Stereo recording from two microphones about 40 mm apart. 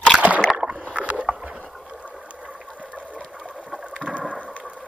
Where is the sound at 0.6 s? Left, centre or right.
Right.